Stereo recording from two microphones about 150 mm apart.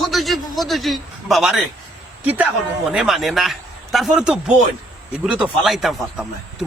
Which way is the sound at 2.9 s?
5° right (ahead or behind).